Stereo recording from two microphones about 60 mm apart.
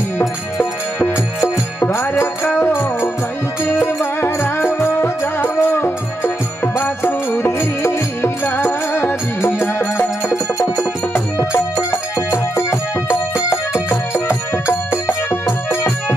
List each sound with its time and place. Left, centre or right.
0.6 s music: left
1.8 s music: left
11.5 s music: left